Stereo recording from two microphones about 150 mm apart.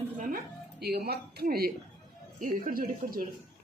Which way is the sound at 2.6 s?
70° right (ahead or behind).